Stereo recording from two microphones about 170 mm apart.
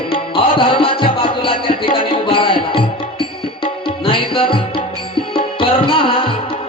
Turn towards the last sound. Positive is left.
turn(degrees=30)  # may be behind; listen again after turning